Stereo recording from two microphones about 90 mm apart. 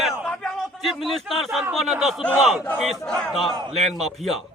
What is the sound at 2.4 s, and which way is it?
Crowd, 5° right (ahead or behind).